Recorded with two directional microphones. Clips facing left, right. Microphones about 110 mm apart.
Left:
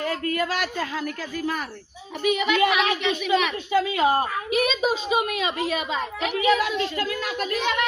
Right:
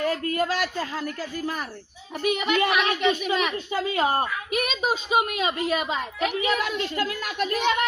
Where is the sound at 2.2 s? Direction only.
45° right (ahead or behind).